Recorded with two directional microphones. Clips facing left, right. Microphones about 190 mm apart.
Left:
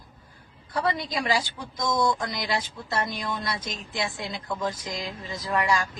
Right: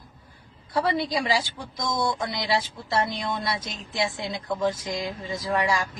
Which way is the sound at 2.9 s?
25° right (ahead or behind).